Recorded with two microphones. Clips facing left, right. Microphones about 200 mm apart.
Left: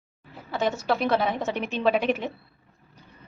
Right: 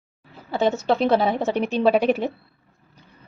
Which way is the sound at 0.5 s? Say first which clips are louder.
Right 5 dB; 25° right (ahead or behind).